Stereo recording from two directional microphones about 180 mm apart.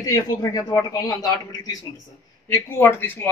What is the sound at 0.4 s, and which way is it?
Speech, 20° left (ahead or behind).